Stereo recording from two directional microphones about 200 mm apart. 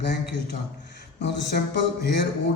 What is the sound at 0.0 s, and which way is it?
Speech, 55° left (ahead or behind).